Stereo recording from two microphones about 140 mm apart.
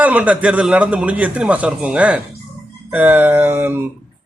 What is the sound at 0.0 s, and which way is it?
Speech, 10° right (ahead or behind).